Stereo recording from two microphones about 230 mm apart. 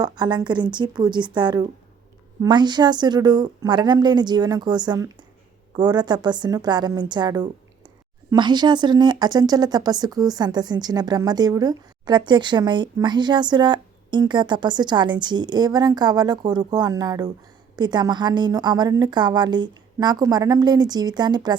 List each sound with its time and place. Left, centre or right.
0.0 s speech: centre